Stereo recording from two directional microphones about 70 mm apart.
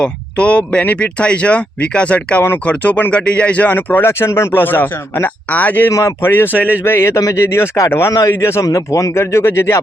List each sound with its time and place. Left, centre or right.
0.0 s speech: centre
5.9 s speech: left
6.2 s speech: left
8.6 s speech: left